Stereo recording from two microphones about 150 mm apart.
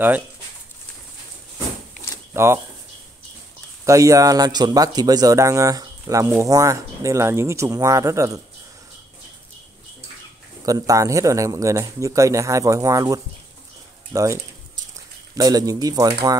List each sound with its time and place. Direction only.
2.3 s speech: 15° right (ahead or behind)
3.8 s speech: 20° right (ahead or behind)
10.6 s speech: 25° right (ahead or behind)